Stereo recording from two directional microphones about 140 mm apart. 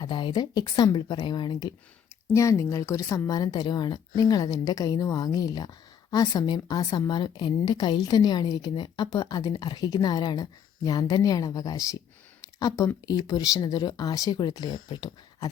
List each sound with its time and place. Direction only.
0.0 s a woman's voice: 35° left (ahead or behind)
12.4 s a sound: 25° left (ahead or behind)
13.1 s a woman's voice: 25° left (ahead or behind)